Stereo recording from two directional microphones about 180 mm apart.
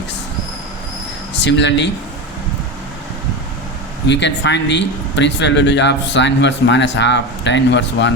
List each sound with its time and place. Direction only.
1.3 s speech: 75° left (ahead or behind)
4.0 s speech: 75° left (ahead or behind)